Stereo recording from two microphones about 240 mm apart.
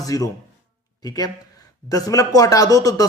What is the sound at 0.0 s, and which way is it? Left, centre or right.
A man's voice, centre.